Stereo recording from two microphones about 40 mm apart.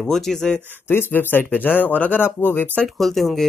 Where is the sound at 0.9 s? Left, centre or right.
Left.